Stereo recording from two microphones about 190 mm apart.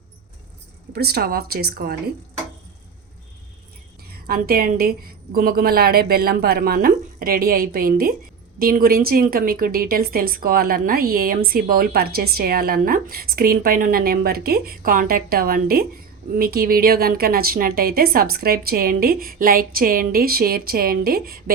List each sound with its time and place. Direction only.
0.9 s a woman's voice: 55° right (ahead or behind)
4.3 s a woman's voice: 50° right (ahead or behind)